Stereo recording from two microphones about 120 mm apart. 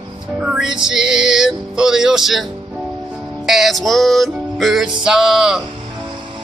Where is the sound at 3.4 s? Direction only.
Centre (ahead or behind).